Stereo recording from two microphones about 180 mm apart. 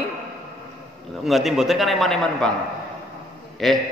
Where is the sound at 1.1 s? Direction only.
Centre (ahead or behind).